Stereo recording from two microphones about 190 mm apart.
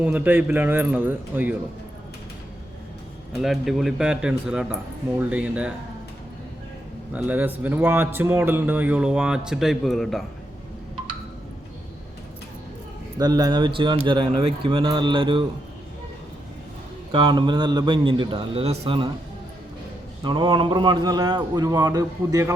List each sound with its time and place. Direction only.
0.0 s a man's voice: 10° right (ahead or behind)
3.3 s a man's voice: centre (ahead or behind)
7.1 s a man's voice: 10° right (ahead or behind)
13.1 s a man's voice: 20° right (ahead or behind)
17.1 s a man's voice: 25° right (ahead or behind)
20.2 s a man's voice: 25° right (ahead or behind)